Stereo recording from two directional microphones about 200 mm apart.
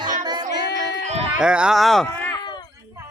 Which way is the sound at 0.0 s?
40° right (ahead or behind).